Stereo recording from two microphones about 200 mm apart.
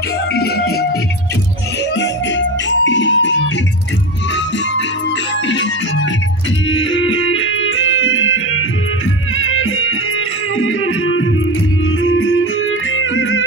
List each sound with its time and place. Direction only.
0.3 s music: 50° left (ahead or behind)
2.0 s music: 65° left (ahead or behind)
6.7 s music: 75° left (ahead or behind)